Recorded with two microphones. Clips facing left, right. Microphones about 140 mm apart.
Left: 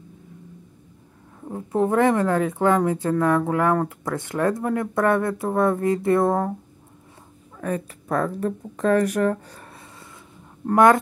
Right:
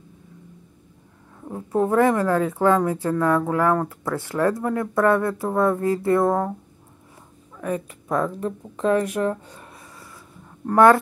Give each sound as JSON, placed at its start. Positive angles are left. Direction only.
{"t": 1.5, "sound": "speech", "side_deg": 25}
{"t": 7.6, "sound": "speech", "side_deg": 35}
{"t": 9.7, "sound": "a sound", "side_deg": 25}
{"t": 10.7, "sound": "speech", "side_deg": 20}